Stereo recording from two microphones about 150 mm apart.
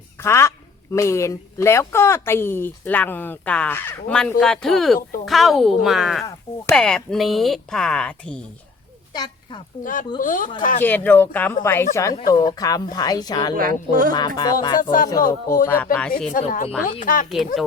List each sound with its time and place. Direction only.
0.2 s speech: 15° left (ahead or behind)
9.1 s speech: 30° left (ahead or behind)
9.8 s speech: 65° left (ahead or behind)
10.8 s speech: 10° left (ahead or behind)
12.2 s speech: 25° left (ahead or behind)
13.6 s speech: 65° right (ahead or behind)
14.1 s speech: 25° left (ahead or behind)
14.8 s speech: 65° left (ahead or behind)
15.6 s speech: 10° left (ahead or behind)
16.3 s speech: 65° left (ahead or behind)
17.2 s speech: centre (ahead or behind)